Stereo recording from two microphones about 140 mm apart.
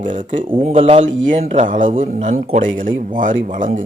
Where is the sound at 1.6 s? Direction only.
70° right (ahead or behind).